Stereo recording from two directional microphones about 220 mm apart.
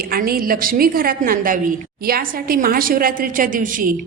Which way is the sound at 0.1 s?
40° right (ahead or behind).